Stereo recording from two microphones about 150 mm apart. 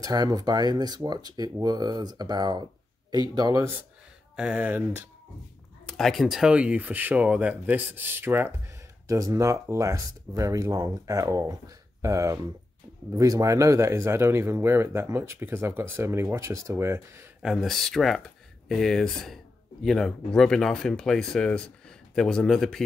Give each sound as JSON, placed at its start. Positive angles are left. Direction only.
{"t": 0.0, "sound": "speech", "side_deg": -25}
{"t": 4.4, "sound": "speech", "side_deg": -10}
{"t": 5.9, "sound": "speech", "side_deg": 0}
{"t": 17.4, "sound": "speech", "side_deg": 0}